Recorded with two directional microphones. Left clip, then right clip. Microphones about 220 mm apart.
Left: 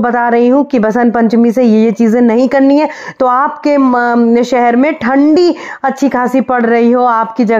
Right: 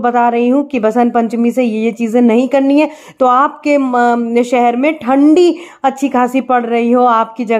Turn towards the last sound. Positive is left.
turn(degrees=25)  # may be behind; listen again after turning